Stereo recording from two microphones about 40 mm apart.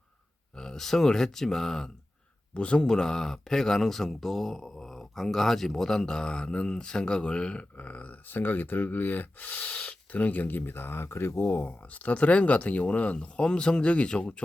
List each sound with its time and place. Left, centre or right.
0.6 s speech: centre
2.6 s speech: left
2.8 s speech: centre
7.8 s speech: left
8.3 s speech: left
9.6 s speech: left
10.1 s speech: left
11.3 s speech: left
12.1 s speech: left
13.1 s speech: left